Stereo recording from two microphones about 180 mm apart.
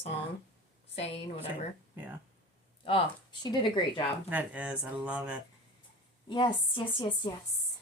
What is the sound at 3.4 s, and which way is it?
Speech, 25° left (ahead or behind).